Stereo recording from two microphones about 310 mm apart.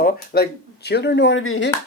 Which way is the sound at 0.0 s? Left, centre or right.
Left.